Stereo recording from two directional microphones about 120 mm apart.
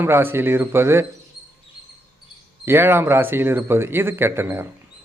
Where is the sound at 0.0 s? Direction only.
20° right (ahead or behind).